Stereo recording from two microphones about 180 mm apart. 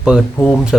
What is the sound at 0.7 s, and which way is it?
Speech, centre (ahead or behind).